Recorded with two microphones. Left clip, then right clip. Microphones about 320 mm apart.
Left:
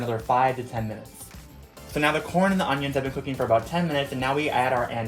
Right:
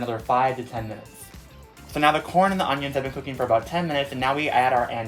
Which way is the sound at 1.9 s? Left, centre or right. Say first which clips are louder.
Right 4 dB; right.